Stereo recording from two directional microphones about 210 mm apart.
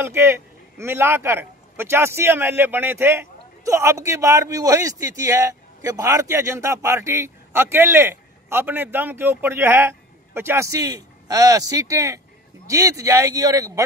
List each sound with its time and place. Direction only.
0.0 s a man's voice: 10° right (ahead or behind)